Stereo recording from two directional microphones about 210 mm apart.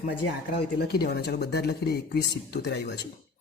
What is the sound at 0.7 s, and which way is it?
Speech, 50° left (ahead or behind).